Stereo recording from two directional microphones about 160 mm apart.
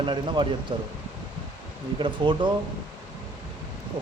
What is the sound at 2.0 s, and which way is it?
Speech, 30° right (ahead or behind).